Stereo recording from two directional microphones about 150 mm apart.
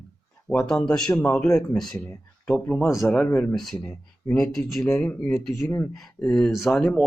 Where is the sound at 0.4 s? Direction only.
5° left (ahead or behind).